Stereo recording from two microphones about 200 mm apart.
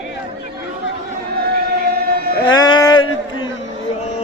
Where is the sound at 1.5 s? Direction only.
50° right (ahead or behind).